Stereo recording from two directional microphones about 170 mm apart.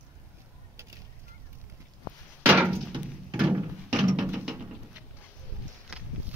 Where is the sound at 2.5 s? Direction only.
10° right (ahead or behind).